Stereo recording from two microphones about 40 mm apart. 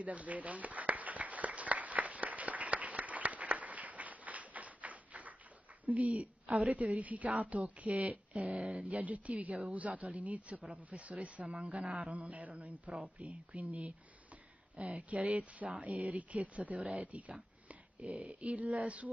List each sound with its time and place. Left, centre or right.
0.0 s a sound: right
5.9 s a man's voice: right
8.5 s speech: right
8.8 s a man's voice: right